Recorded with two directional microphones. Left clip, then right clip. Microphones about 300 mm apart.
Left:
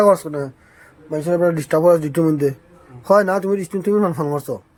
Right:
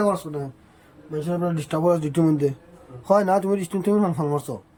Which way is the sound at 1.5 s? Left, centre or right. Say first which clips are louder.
Left 6 dB; centre.